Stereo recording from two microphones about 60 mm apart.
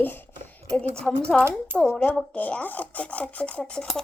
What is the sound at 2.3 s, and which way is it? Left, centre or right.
A child's voice, left.